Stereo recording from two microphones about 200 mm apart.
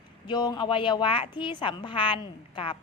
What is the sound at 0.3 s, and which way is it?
Speech, 20° left (ahead or behind).